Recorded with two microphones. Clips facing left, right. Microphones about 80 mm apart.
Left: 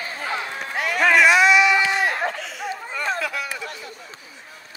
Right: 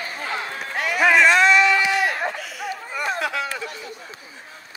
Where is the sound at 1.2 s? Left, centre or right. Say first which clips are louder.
Left 1 dB; centre.